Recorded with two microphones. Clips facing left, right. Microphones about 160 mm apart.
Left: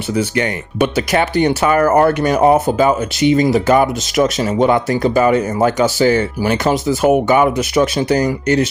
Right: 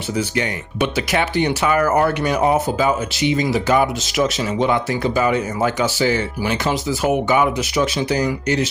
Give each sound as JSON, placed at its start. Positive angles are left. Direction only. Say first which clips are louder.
{"t": 0.2, "sound": "speech", "louder": "left 4 dB", "side_deg": 60}